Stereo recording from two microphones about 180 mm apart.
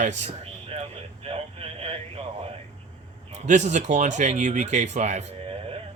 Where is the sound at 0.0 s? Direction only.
45° right (ahead or behind).